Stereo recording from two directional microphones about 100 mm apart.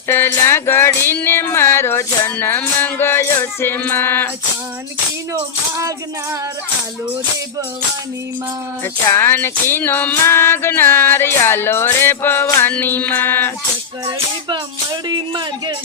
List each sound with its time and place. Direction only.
0.1 s music: 25° left (ahead or behind)
5.3 s speech: 30° right (ahead or behind)
8.8 s music: 20° left (ahead or behind)
14.0 s music: 45° right (ahead or behind)